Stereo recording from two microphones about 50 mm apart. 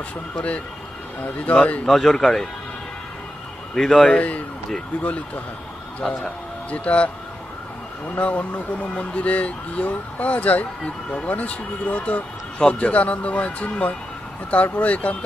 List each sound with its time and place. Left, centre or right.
1.5 s speech: left
1.9 s speech: centre
3.7 s speech: centre
4.2 s speech: left
6.0 s speech: centre
6.7 s speech: left
8.1 s speech: left